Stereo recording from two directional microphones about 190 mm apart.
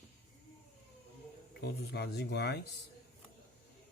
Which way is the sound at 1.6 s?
60° left (ahead or behind).